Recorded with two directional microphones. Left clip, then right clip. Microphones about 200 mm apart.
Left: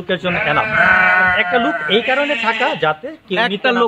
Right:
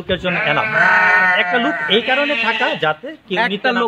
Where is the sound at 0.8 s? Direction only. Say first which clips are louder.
Even; 15° right (ahead or behind).